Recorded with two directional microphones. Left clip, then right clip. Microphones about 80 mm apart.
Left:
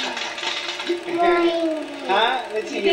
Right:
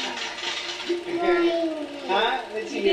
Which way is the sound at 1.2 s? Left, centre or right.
Left.